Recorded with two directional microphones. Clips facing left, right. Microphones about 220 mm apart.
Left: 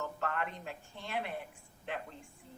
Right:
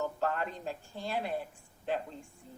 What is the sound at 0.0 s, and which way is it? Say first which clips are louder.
A woman's voice: right 4 dB; 35° right (ahead or behind).